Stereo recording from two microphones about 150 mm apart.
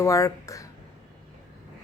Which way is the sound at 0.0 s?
20° left (ahead or behind).